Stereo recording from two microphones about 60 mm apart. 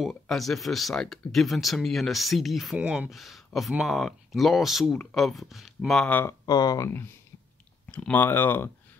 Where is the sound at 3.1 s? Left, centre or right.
Centre.